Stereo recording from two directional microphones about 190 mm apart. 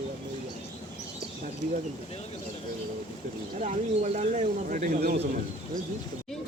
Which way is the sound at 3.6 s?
40° right (ahead or behind).